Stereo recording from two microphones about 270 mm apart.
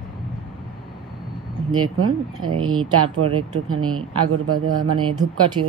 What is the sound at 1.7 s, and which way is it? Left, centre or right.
A woman's voice, right.